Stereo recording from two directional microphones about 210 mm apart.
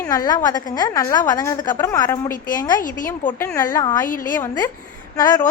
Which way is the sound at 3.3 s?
15° left (ahead or behind).